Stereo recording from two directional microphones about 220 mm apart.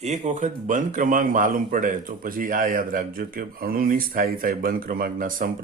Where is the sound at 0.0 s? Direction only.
30° right (ahead or behind).